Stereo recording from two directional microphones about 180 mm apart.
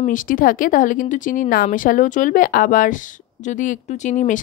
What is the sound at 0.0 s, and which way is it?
Speech, 50° left (ahead or behind).